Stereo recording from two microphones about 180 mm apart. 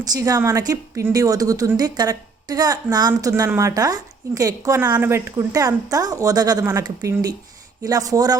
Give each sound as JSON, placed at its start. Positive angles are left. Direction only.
{"t": 0.1, "sound": "a woman's voice", "side_deg": -20}